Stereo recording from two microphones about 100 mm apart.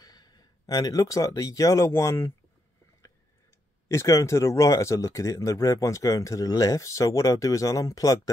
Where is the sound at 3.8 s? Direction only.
30° left (ahead or behind).